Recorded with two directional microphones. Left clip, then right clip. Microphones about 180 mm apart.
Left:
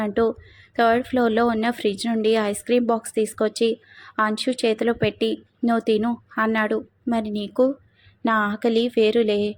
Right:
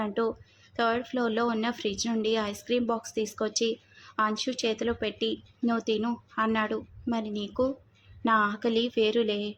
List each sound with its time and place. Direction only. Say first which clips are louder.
0.0 s a woman's voice: left 8 dB; 25° left (ahead or behind)